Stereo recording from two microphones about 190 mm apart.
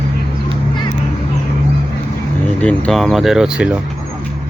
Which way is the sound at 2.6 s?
5° left (ahead or behind).